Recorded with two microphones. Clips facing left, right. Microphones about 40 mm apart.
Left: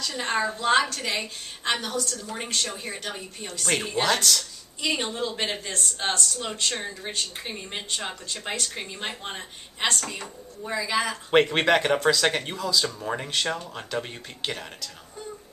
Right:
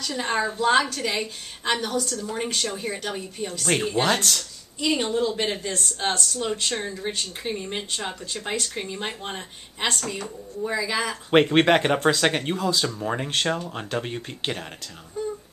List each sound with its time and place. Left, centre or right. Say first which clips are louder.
0.0 s speech: right 1 dB; centre
4.0 s speech: left 2 dB; right
4.7 s speech: right 4 dB; centre
11.4 s speech: right 3 dB; right
12.0 s speech: right 1 dB; right
12.3 s speech: right 2 dB; centre
12.5 s speech: right 2 dB; right
12.8 s speech: right 3 dB; centre